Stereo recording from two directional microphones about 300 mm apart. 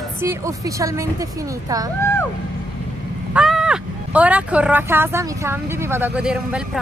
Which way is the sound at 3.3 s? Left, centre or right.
Centre.